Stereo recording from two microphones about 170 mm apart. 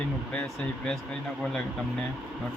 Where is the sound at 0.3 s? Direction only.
5° left (ahead or behind).